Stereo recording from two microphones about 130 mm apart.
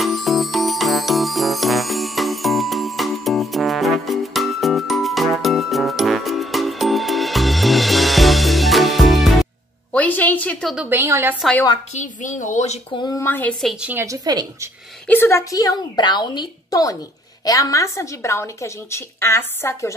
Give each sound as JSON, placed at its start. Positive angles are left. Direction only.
{"t": 0.0, "sound": "music", "side_deg": 0}
{"t": 9.9, "sound": "a sound", "side_deg": 15}
{"t": 10.9, "sound": "speech", "side_deg": -20}
{"t": 11.9, "sound": "a woman's voice", "side_deg": 70}
{"t": 12.9, "sound": "speech", "side_deg": 30}
{"t": 13.2, "sound": "a woman's voice", "side_deg": 15}
{"t": 13.7, "sound": "a woman's voice", "side_deg": -10}
{"t": 14.0, "sound": "speech", "side_deg": -30}
{"t": 15.0, "sound": "a woman's voice", "side_deg": 15}